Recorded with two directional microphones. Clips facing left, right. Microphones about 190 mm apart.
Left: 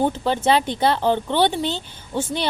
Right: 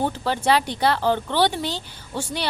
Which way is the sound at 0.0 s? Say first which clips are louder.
Left 3 dB; 20° left (ahead or behind).